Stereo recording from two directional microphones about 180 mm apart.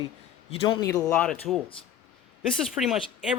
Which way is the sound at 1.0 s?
5° left (ahead or behind).